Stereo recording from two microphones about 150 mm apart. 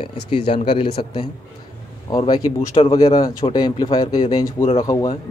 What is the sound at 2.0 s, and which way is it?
Speech, 30° left (ahead or behind).